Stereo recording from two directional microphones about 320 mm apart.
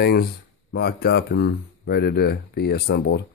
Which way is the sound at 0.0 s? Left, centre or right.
Left.